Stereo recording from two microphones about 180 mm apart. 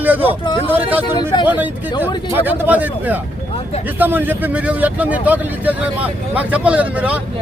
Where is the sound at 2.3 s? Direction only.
10° right (ahead or behind).